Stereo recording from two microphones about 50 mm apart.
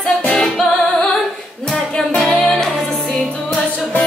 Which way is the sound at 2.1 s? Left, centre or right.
Centre.